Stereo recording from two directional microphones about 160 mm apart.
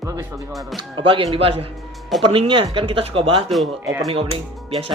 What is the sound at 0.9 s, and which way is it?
Speech, 30° right (ahead or behind).